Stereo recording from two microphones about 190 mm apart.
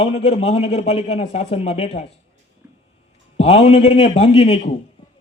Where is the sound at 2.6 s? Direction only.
10° right (ahead or behind).